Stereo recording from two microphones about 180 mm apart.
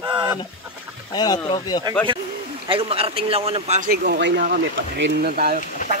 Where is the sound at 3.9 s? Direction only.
60° right (ahead or behind).